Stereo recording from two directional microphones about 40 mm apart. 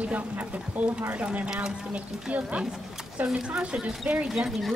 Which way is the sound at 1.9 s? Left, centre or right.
Right.